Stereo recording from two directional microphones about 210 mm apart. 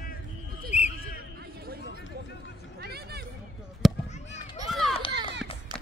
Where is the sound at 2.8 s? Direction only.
50° right (ahead or behind).